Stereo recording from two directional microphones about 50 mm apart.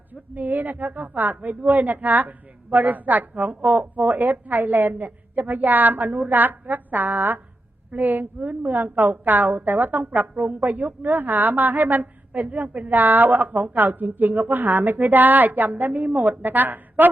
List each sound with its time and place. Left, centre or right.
0.1 s a woman's voice: right